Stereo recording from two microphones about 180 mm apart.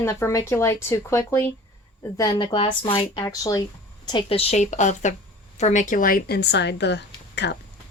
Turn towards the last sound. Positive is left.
turn(degrees=70)  # may be behind; listen again after turning